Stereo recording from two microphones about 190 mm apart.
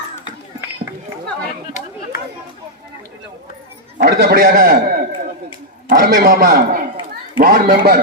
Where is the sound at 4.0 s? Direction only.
55° right (ahead or behind).